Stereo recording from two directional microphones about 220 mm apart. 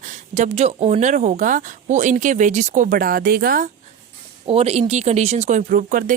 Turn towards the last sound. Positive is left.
turn(degrees=-35)  # may be behind; listen again after turning